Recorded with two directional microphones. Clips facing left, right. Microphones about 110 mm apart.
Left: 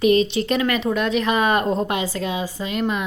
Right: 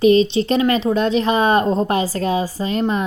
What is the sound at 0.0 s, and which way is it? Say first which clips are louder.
Speech: right 4 dB; 30° right (ahead or behind).